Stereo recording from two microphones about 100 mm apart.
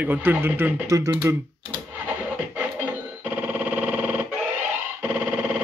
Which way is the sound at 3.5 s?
15° right (ahead or behind).